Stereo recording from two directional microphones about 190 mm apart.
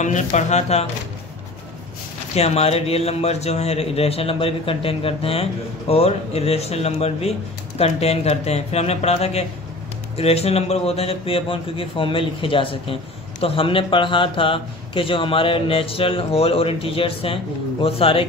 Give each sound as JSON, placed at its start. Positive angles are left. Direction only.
{"t": 0.0, "sound": "a man's voice", "side_deg": 40}
{"t": 2.3, "sound": "a man's voice", "side_deg": 35}